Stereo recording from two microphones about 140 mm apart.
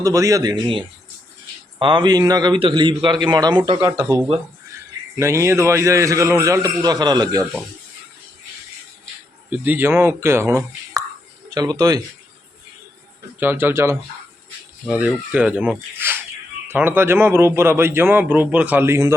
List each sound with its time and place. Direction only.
0.0 s a man's voice: 25° right (ahead or behind)
3.8 s a man's voice: 20° right (ahead or behind)
9.5 s a man's voice: 15° right (ahead or behind)
13.4 s a man's voice: 15° right (ahead or behind)
14.8 s a man's voice: 5° right (ahead or behind)